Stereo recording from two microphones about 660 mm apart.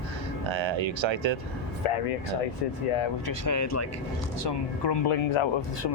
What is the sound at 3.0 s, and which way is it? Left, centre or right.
Speech, left.